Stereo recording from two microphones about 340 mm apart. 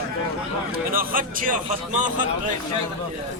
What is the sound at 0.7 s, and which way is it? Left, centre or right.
A man's voice, right.